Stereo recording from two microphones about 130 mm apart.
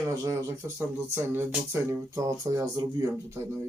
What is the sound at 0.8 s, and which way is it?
Speech, 20° right (ahead or behind).